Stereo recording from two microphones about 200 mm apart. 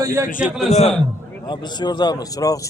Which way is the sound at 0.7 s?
35° left (ahead or behind).